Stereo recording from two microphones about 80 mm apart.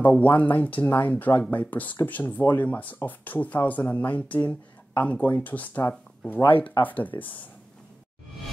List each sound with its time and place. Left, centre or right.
0.0 s speech: centre